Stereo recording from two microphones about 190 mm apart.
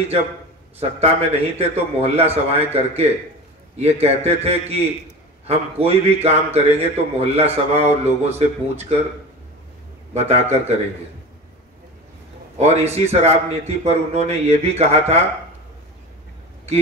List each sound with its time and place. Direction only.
0.7 s a man's voice: 35° right (ahead or behind)
10.1 s a man's voice: 35° right (ahead or behind)
12.5 s a man's voice: 35° right (ahead or behind)